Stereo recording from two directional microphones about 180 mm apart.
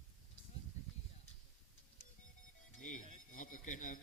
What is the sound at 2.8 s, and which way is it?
A man's voice, 45° left (ahead or behind).